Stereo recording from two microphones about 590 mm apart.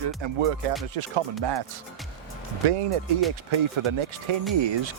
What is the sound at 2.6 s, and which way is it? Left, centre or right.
Speech, right.